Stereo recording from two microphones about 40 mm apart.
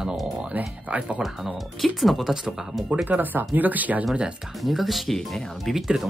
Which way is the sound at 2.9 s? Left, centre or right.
Right.